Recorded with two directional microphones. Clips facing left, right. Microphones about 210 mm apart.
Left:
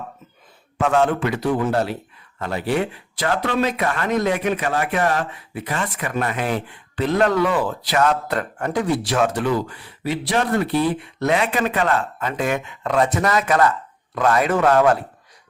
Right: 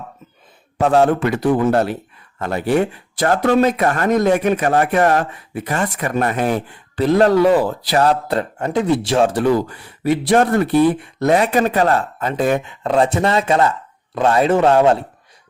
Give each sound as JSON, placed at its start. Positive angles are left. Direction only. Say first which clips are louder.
{"t": 0.8, "sound": "a man's voice", "louder": "right 4 dB", "side_deg": -35}